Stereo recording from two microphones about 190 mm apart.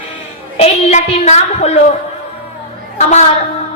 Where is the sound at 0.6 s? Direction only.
35° left (ahead or behind).